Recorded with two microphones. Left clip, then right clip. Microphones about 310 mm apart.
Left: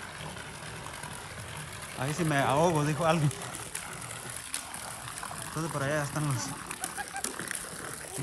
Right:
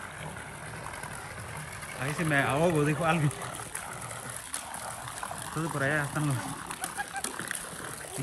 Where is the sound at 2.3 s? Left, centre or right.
Centre.